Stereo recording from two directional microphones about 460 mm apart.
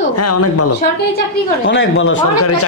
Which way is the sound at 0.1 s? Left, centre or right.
Left.